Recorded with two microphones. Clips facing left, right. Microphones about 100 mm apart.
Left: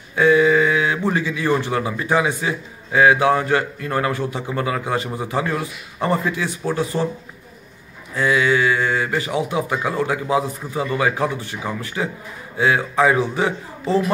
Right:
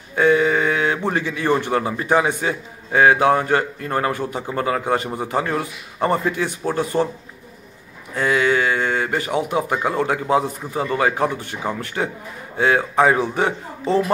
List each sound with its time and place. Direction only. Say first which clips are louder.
0.1 s a sound: left 2 dB; 45° right (ahead or behind)
1.1 s a man's voice: even; 50° right (ahead or behind)
8.2 s a man's voice: left 1 dB; 45° right (ahead or behind)